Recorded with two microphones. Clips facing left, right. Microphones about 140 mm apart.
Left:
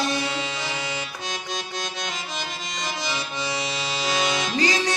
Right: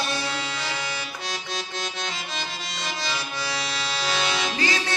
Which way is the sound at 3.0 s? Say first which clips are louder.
Left 1 dB; 15° left (ahead or behind).